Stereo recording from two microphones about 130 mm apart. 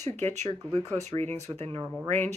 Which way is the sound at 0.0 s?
60° right (ahead or behind).